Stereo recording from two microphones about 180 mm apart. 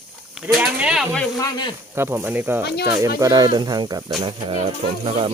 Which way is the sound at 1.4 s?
25° left (ahead or behind).